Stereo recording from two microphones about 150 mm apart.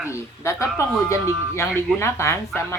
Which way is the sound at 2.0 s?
15° left (ahead or behind).